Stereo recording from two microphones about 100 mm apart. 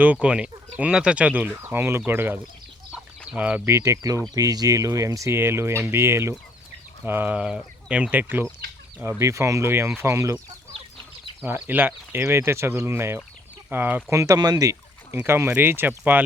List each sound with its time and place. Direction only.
0.0 s speech: 15° right (ahead or behind)
3.7 s speech: 30° right (ahead or behind)
7.3 s speech: 10° right (ahead or behind)
9.0 s speech: 30° right (ahead or behind)
11.4 s speech: 20° right (ahead or behind)
14.2 s speech: 40° right (ahead or behind)
15.1 s speech: 25° right (ahead or behind)